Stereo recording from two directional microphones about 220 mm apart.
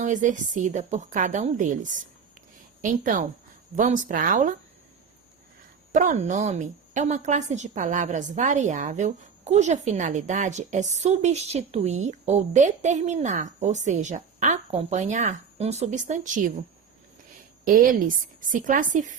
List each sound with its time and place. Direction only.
0.0 s a woman's voice: 35° right (ahead or behind)
5.9 s a woman's voice: 35° right (ahead or behind)
18.5 s a woman's voice: 35° right (ahead or behind)